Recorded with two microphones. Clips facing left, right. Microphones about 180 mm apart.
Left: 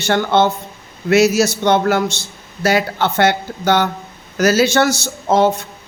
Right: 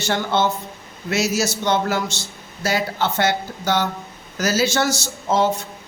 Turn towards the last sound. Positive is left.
turn(degrees=60)  # may be behind; listen again after turning